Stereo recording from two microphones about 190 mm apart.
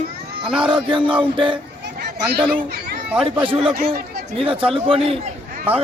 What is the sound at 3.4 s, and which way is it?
A man's voice, 30° right (ahead or behind).